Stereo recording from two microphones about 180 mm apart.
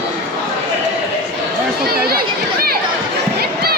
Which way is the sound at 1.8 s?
60° right (ahead or behind).